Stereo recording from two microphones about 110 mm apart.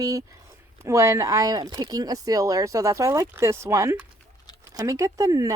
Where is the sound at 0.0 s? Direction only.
30° right (ahead or behind).